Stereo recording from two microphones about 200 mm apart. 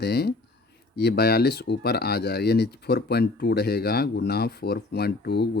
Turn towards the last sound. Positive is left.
turn(degrees=55)  # may be behind; listen again after turning